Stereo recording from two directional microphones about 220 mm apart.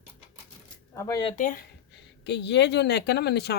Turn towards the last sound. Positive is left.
turn(degrees=50)  # may be behind; listen again after turning